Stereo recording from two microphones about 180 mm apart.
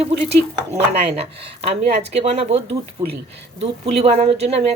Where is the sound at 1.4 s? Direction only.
35° right (ahead or behind).